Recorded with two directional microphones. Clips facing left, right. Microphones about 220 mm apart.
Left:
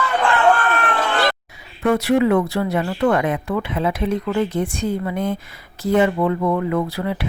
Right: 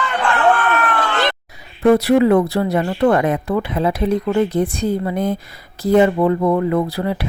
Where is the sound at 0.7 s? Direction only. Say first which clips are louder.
Right 2 dB; 30° left (ahead or behind).